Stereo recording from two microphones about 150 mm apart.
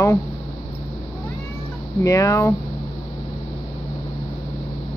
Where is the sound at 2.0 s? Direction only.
20° left (ahead or behind).